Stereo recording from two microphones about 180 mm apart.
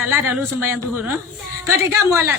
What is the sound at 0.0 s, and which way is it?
Speech, 10° right (ahead or behind).